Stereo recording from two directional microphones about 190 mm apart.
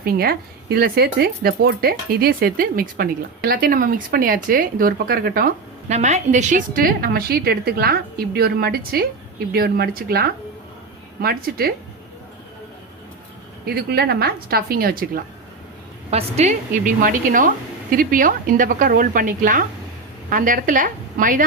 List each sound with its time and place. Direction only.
0.0 s speech: 50° right (ahead or behind)
13.7 s speech: 55° right (ahead or behind)
16.0 s speech: 35° right (ahead or behind)